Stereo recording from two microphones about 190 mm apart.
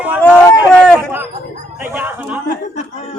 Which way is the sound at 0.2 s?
5° left (ahead or behind).